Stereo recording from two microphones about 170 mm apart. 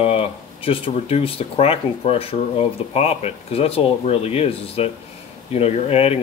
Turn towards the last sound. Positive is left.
turn(degrees=35)  # may be behind; listen again after turning